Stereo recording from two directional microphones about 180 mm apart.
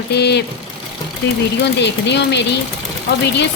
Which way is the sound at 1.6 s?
70° left (ahead or behind).